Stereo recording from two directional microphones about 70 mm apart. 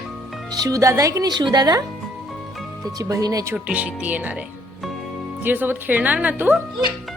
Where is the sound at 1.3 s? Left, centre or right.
Right.